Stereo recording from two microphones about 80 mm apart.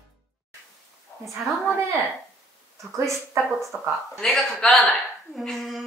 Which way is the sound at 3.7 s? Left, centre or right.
Right.